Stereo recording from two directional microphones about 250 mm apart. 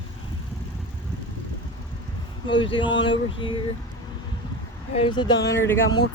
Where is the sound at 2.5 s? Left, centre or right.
Centre.